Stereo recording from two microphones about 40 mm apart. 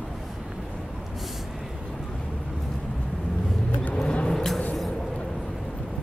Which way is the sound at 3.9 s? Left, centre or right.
Left.